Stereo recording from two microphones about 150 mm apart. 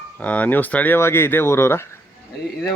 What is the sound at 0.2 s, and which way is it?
Speech, 10° left (ahead or behind).